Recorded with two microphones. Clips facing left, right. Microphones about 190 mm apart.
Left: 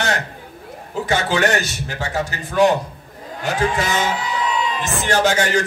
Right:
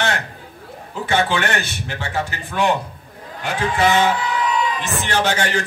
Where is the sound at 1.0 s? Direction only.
40° left (ahead or behind).